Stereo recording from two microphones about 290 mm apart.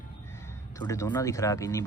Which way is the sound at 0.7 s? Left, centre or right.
Centre.